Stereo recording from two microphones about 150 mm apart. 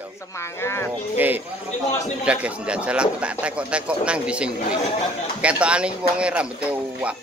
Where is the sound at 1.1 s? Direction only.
10° right (ahead or behind).